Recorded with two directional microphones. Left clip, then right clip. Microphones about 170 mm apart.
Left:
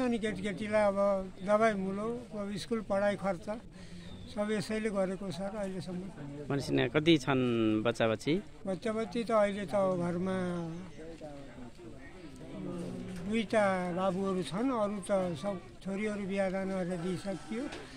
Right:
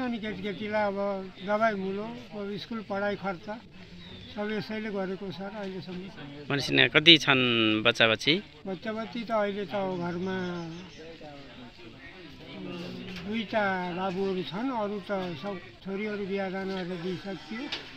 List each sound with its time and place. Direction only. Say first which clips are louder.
0.0 s speech: even; 35° left (ahead or behind)
6.4 s speech: right 8 dB; 10° left (ahead or behind)
8.6 s speech: even; 30° left (ahead or behind)
13.3 s speech: right 1 dB; 35° left (ahead or behind)